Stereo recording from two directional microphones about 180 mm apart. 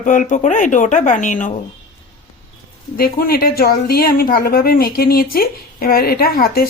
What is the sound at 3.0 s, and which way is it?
A woman's voice, 55° left (ahead or behind).